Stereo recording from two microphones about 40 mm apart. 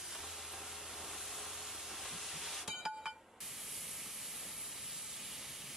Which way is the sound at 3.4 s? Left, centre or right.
Centre.